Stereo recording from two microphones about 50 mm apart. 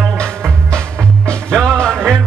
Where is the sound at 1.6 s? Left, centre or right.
Centre.